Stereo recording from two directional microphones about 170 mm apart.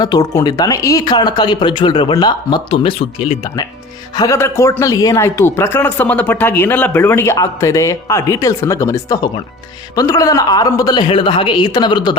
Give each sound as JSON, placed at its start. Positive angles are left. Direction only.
{"t": 0.0, "sound": "speech", "side_deg": 20}
{"t": 4.2, "sound": "speech", "side_deg": 15}